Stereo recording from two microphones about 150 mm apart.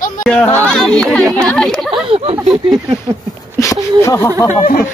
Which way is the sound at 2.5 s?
25° right (ahead or behind).